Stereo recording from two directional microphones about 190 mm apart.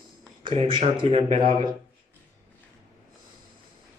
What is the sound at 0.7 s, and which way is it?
Speech, 30° right (ahead or behind).